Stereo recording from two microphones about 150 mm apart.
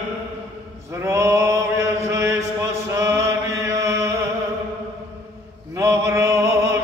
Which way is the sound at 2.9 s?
20° right (ahead or behind).